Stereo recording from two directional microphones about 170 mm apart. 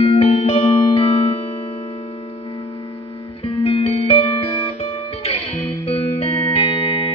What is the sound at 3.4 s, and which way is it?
Music, 35° left (ahead or behind).